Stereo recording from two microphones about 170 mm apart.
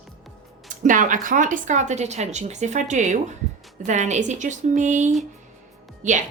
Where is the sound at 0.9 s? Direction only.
50° right (ahead or behind).